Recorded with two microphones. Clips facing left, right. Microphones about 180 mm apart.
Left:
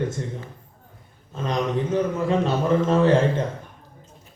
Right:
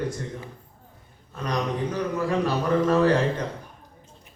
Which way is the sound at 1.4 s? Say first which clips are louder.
Left 3 dB; 25° left (ahead or behind).